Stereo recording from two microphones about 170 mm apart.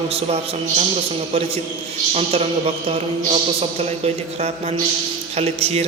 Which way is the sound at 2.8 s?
35° right (ahead or behind).